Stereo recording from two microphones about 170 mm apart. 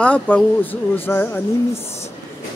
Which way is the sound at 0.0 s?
10° left (ahead or behind).